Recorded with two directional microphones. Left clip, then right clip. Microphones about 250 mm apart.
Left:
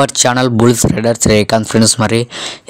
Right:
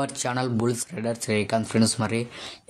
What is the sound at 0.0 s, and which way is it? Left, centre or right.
Speech, left.